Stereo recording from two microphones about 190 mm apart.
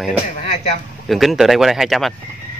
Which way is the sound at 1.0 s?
Centre (ahead or behind).